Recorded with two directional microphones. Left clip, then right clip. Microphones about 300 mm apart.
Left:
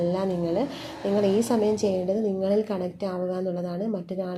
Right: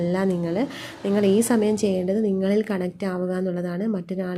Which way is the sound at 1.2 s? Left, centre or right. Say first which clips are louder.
Right 3 dB; right.